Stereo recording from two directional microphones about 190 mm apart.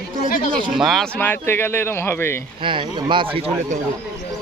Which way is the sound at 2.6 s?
25° right (ahead or behind).